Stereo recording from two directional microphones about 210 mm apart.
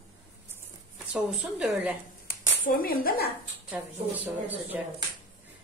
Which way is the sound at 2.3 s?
45° left (ahead or behind).